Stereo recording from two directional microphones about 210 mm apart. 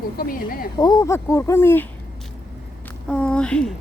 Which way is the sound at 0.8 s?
20° left (ahead or behind).